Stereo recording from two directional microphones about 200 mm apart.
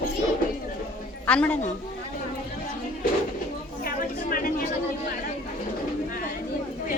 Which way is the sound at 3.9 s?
45° left (ahead or behind).